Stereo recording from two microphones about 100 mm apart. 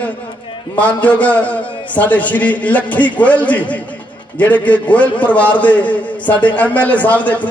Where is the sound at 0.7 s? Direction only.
15° left (ahead or behind).